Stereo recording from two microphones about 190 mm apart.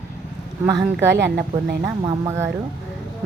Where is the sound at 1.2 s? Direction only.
60° right (ahead or behind).